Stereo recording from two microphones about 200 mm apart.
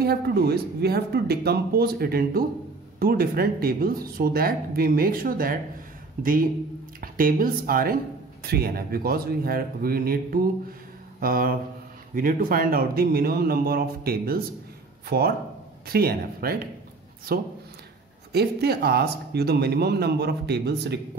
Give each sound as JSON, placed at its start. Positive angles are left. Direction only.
{"t": 0.0, "sound": "speech", "side_deg": -50}
{"t": 11.1, "sound": "mantra", "side_deg": -45}
{"t": 12.2, "sound": "speech", "side_deg": -45}